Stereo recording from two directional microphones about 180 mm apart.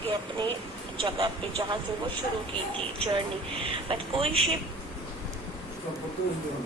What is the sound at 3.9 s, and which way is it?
Speech, 30° right (ahead or behind).